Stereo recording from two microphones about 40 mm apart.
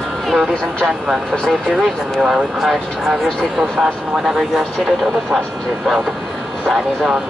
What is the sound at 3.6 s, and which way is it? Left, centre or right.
Speech, centre.